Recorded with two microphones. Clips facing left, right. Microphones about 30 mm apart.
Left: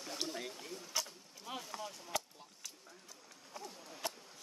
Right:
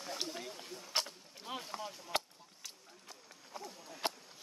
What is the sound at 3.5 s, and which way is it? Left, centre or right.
Run, right.